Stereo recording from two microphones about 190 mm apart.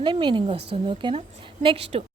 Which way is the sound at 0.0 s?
25° right (ahead or behind).